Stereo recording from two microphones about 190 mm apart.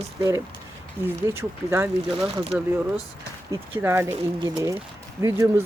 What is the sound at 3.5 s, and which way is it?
Speech, 10° right (ahead or behind).